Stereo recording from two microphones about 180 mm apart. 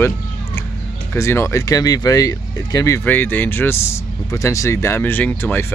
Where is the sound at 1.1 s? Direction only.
15° left (ahead or behind).